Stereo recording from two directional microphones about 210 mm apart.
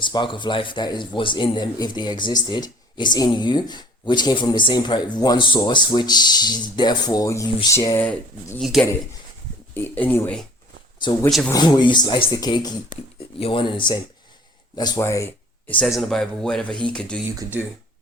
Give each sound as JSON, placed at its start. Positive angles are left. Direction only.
{"t": 0.0, "sound": "speech", "side_deg": 20}
{"t": 8.0, "sound": "speech", "side_deg": 5}
{"t": 11.4, "sound": "speech", "side_deg": 20}
{"t": 17.4, "sound": "speech", "side_deg": -10}